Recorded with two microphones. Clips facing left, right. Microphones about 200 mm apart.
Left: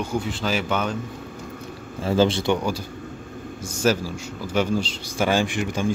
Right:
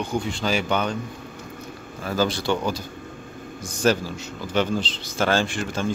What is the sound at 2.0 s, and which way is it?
A man's voice, 25° left (ahead or behind).